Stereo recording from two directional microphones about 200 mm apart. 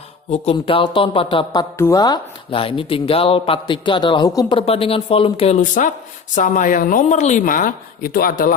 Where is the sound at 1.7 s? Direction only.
15° left (ahead or behind).